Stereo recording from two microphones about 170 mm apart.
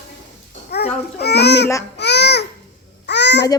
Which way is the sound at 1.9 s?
80° left.